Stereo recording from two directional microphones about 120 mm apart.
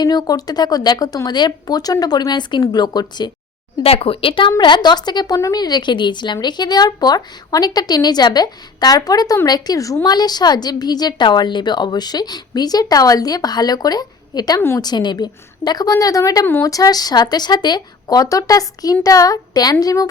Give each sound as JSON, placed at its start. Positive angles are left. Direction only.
{"t": 0.0, "sound": "a woman's voice", "side_deg": 35}
{"t": 3.8, "sound": "a woman's voice", "side_deg": 55}